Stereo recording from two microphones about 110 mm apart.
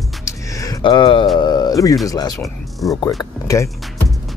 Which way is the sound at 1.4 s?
35° left (ahead or behind).